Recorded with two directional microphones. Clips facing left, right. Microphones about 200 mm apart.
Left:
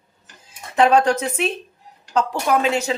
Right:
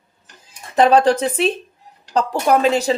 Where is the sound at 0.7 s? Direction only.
35° right (ahead or behind).